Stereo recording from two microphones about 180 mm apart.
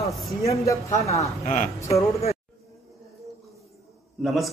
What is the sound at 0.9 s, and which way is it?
Speech, 35° left (ahead or behind).